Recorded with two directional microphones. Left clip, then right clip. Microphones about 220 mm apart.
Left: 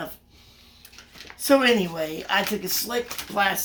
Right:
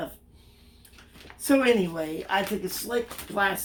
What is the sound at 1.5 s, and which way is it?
Speech, 15° left (ahead or behind).